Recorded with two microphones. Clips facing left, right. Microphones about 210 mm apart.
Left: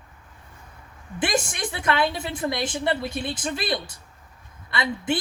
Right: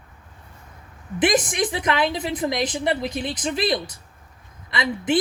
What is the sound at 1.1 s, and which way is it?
A woman's voice, 20° right (ahead or behind).